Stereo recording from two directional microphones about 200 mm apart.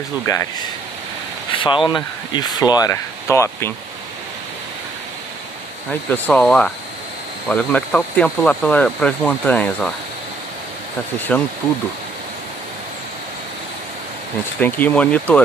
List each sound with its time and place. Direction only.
0.3 s speech: 15° left (ahead or behind)
1.5 s a sound: 25° left (ahead or behind)
1.9 s speech: 20° left (ahead or behind)
5.9 s speech: 10° left (ahead or behind)
11.1 s speech: 10° left (ahead or behind)
14.6 s speech: 10° left (ahead or behind)